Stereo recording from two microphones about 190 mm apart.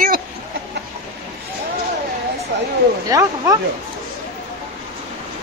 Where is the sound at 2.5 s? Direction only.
65° right (ahead or behind).